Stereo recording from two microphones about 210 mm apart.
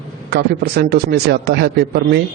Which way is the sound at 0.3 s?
50° right (ahead or behind).